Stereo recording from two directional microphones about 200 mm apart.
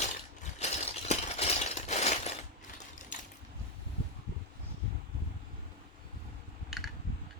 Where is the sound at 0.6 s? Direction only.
30° left (ahead or behind).